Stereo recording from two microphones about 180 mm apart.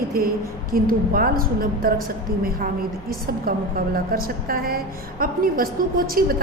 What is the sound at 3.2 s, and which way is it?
A woman's voice, 55° right (ahead or behind).